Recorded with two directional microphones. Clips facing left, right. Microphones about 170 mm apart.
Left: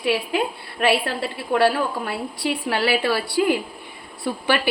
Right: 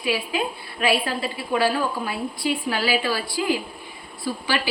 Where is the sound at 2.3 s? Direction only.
70° left (ahead or behind).